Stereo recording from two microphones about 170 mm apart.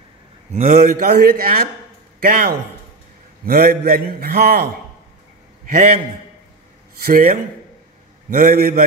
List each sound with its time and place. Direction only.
0.5 s a man's voice: 50° right (ahead or behind)
5.7 s a man's voice: 50° right (ahead or behind)